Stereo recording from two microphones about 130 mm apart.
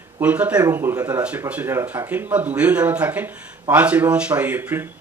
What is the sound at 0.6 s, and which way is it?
Speech, 20° right (ahead or behind).